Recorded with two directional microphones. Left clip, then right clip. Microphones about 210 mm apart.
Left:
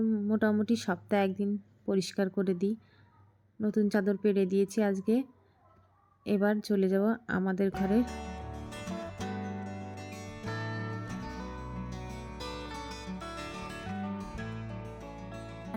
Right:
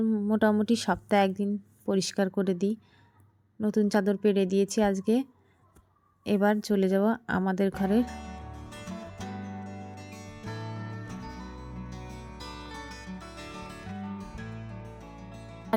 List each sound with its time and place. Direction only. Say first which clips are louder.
0.0 s speech: right 4 dB; 15° right (ahead or behind)
7.7 s speech: right 2 dB; centre (ahead or behind)
8.0 s music: even; centre (ahead or behind)